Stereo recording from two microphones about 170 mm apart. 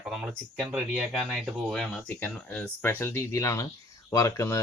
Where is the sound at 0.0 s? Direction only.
Centre (ahead or behind).